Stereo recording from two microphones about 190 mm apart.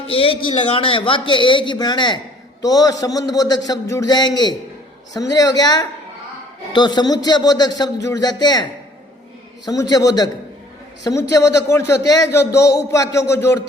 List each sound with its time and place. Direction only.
0.1 s a man's voice: 30° left (ahead or behind)
9.6 s a man's voice: 20° left (ahead or behind)